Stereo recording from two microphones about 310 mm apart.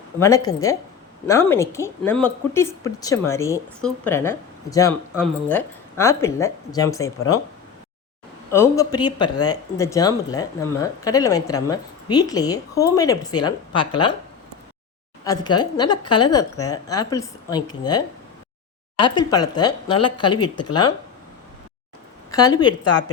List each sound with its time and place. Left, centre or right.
0.2 s a woman's voice: centre
8.4 s a woman's voice: centre
15.2 s a woman's voice: centre
22.3 s speech: centre
22.8 s speech: left